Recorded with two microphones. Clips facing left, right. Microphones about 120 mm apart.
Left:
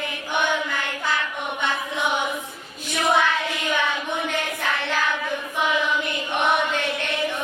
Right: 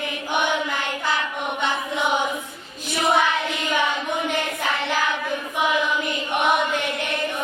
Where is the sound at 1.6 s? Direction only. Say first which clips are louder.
Right 1 dB; 15° right (ahead or behind).